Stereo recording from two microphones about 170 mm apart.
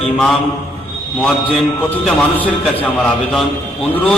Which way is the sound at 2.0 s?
10° left (ahead or behind).